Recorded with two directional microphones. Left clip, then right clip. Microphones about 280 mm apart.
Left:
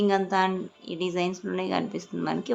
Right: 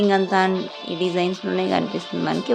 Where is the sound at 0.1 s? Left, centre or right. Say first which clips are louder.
Right 5 dB; centre.